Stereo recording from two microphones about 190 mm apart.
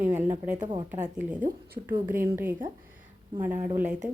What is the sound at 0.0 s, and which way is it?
Speech, 10° right (ahead or behind).